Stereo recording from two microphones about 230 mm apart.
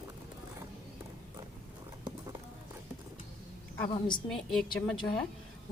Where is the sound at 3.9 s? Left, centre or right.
Centre.